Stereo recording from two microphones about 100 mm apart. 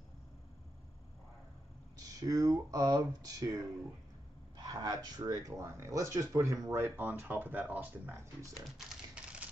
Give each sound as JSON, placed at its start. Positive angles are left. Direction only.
{"t": 2.0, "sound": "speech", "side_deg": -40}
{"t": 8.6, "sound": "speech", "side_deg": 0}